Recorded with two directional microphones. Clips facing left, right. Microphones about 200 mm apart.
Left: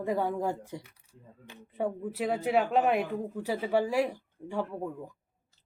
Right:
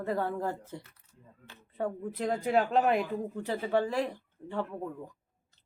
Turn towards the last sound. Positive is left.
turn(degrees=10)  # may be behind; listen again after turning